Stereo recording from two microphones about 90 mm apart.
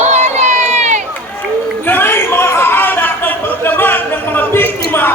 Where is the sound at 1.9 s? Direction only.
25° left (ahead or behind).